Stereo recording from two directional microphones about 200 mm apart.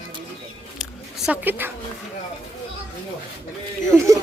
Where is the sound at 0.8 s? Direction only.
5° right (ahead or behind).